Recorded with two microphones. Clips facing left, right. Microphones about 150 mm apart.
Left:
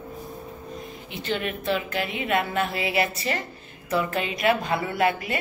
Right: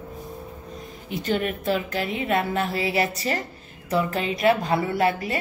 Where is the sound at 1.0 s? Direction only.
45° right (ahead or behind).